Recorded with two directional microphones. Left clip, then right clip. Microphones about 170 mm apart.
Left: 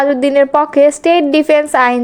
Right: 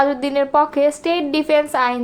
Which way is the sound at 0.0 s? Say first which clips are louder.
Left 7 dB; 30° left (ahead or behind).